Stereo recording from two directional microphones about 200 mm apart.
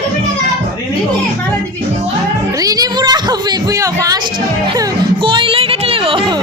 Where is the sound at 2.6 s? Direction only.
20° right (ahead or behind).